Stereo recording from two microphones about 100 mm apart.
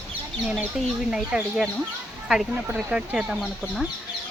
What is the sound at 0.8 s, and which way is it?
Speech, centre (ahead or behind).